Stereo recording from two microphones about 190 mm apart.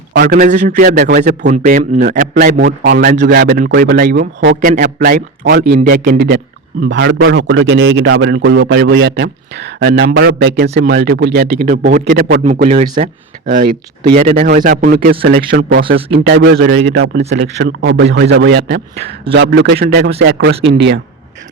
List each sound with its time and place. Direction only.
0.2 s a man's voice: 50° right (ahead or behind)
1.5 s a man's voice: 40° right (ahead or behind)
6.8 s a man's voice: 65° right (ahead or behind)
16.1 s a man's voice: 65° right (ahead or behind)